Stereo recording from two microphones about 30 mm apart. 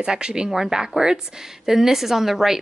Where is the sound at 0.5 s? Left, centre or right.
Centre.